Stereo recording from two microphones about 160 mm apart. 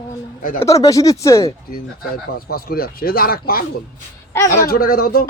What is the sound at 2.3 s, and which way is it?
Speech, 65° left (ahead or behind).